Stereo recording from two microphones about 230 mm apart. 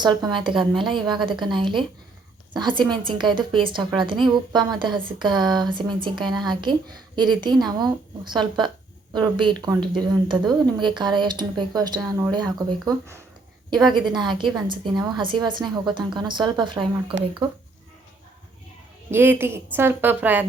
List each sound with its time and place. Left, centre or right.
0.0 s a woman's voice: centre
19.1 s speech: centre